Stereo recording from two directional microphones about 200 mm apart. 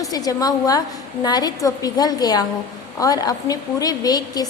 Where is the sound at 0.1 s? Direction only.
20° left (ahead or behind).